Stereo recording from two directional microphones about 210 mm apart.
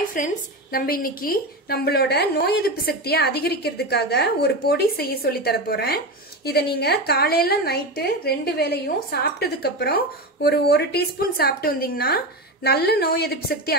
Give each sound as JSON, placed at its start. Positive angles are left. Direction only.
{"t": 0.1, "sound": "a woman's voice", "side_deg": 40}